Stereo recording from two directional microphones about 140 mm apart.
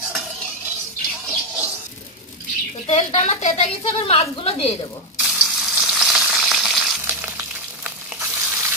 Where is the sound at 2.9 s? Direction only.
50° left (ahead or behind).